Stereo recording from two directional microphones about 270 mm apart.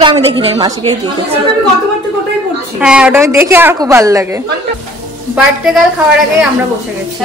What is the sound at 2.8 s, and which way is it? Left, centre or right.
A woman's voice, centre.